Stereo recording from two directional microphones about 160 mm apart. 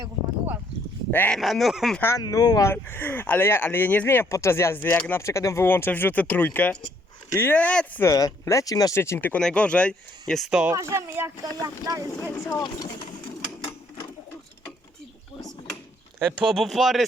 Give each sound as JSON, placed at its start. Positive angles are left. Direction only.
{"t": 1.1, "sound": "speech", "side_deg": 10}
{"t": 1.4, "sound": "speech", "side_deg": 0}
{"t": 2.0, "sound": "speech", "side_deg": 15}
{"t": 8.0, "sound": "speech", "side_deg": 20}
{"t": 10.8, "sound": "speech", "side_deg": -15}
{"t": 12.5, "sound": "speech", "side_deg": 25}
{"t": 15.4, "sound": "a sound", "side_deg": 25}
{"t": 16.2, "sound": "speech", "side_deg": 0}